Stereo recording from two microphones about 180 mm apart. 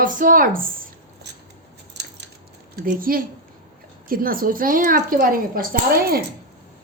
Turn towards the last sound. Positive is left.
turn(degrees=-55)  # may be behind; listen again after turning